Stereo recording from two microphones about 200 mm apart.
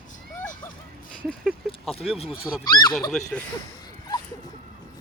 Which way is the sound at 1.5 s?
Centre (ahead or behind).